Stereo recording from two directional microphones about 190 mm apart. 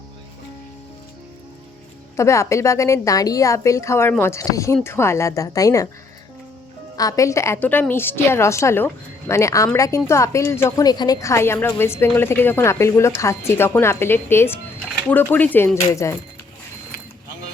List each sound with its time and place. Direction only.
2.1 s a woman's voice: 15° left (ahead or behind)
6.9 s a woman's voice: 15° left (ahead or behind)